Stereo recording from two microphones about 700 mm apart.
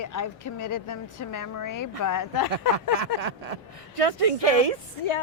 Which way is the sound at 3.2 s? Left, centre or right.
Right.